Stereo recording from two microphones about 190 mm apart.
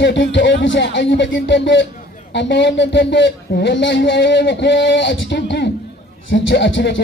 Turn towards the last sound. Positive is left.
turn(degrees=70)  # may be behind; listen again after turning